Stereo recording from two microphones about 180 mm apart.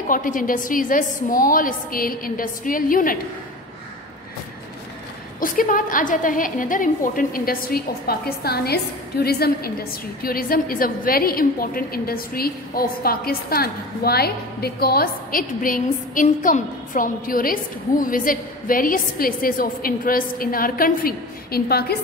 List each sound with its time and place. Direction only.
0.1 s a woman's voice: 50° left (ahead or behind)
5.4 s a woman's voice: 50° left (ahead or behind)